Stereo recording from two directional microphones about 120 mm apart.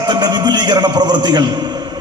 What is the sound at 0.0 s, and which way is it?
A man's voice, 35° right (ahead or behind).